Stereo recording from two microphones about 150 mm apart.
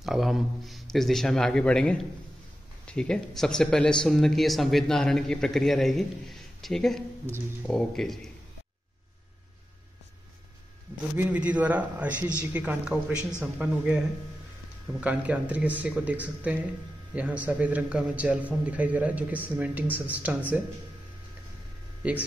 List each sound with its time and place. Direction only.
0.0 s speech: centre (ahead or behind)
11.1 s a man's voice: 10° right (ahead or behind)
22.0 s a man's voice: 10° right (ahead or behind)